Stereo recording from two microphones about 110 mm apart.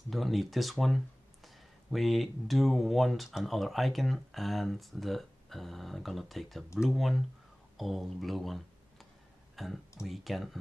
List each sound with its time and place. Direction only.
0.1 s speech: centre (ahead or behind)